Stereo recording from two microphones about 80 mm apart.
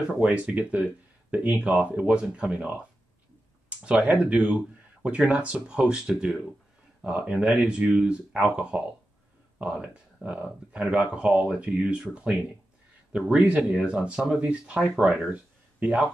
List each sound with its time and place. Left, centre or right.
0.2 s speech: centre